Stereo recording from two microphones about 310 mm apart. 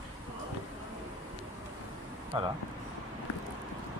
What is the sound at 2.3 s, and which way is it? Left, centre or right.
Speech, centre.